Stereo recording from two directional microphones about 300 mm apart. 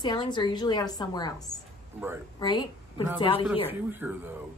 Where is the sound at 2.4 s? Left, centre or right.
Centre.